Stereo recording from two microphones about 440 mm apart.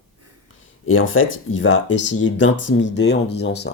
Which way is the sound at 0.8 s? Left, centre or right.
Left.